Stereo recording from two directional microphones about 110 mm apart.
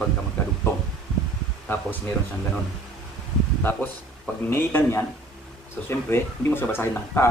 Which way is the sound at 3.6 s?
15° left (ahead or behind).